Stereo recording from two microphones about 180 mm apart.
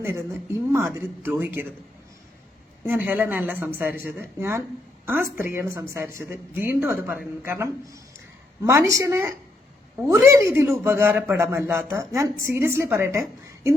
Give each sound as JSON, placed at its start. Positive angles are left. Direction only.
{"t": 0.0, "sound": "speech", "side_deg": -15}
{"t": 2.8, "sound": "speech", "side_deg": -10}